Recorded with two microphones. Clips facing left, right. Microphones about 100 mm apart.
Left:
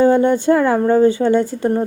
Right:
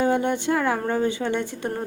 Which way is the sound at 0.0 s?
40° left (ahead or behind).